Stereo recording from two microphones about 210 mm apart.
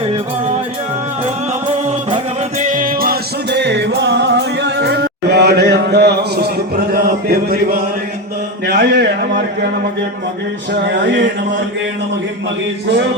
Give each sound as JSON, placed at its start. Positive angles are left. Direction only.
{"t": 1.9, "sound": "music", "side_deg": -30}
{"t": 2.6, "sound": "music", "side_deg": -40}
{"t": 8.6, "sound": "speech", "side_deg": -50}
{"t": 11.0, "sound": "speech", "side_deg": -60}